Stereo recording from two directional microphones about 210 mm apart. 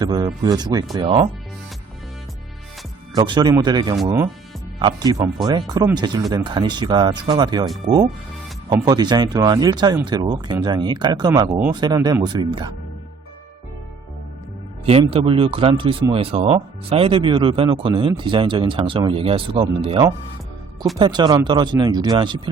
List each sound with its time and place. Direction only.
0.0 s speech: 20° right (ahead or behind)
3.2 s speech: 20° right (ahead or behind)
14.8 s speech: 25° right (ahead or behind)